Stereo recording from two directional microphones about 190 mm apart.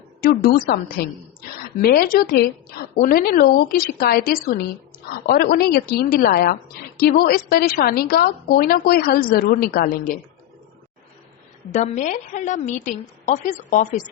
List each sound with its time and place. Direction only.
0.2 s a woman's voice: 50° left (ahead or behind)
11.7 s a woman's voice: 40° left (ahead or behind)